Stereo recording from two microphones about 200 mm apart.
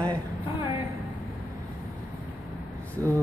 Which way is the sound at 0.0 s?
20° right (ahead or behind).